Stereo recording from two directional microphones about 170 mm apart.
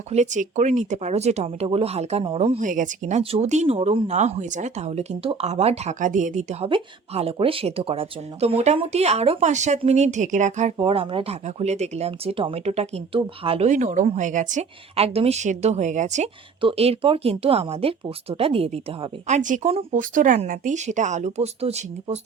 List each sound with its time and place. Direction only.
0.1 s speech: 45° right (ahead or behind)
10.8 s speech: 30° right (ahead or behind)
16.6 s speech: 35° right (ahead or behind)
19.3 s speech: 45° right (ahead or behind)